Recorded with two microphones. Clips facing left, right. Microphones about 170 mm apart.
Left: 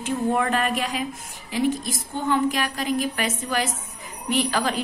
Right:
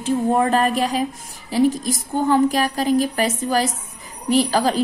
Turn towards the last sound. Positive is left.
turn(degrees=-35)  # may be behind; listen again after turning